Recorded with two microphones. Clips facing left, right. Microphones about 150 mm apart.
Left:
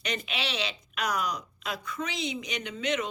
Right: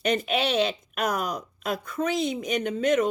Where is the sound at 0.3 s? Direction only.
50° right (ahead or behind).